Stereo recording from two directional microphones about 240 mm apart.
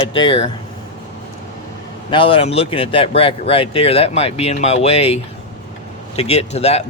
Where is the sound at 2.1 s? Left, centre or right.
Left.